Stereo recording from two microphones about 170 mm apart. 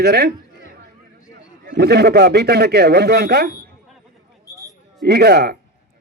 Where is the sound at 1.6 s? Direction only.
70° right (ahead or behind).